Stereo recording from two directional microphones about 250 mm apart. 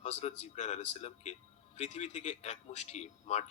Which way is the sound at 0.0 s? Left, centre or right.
Left.